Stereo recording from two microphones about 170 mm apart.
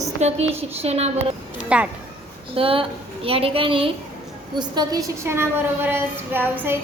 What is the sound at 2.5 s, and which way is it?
A woman's voice, 35° right (ahead or behind).